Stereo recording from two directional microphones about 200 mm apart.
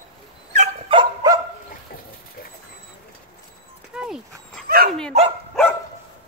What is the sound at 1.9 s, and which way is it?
Vehicle, 50° left (ahead or behind).